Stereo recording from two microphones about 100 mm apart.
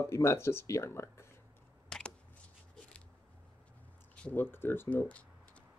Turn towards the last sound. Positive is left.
turn(degrees=15)  # may be behind; listen again after turning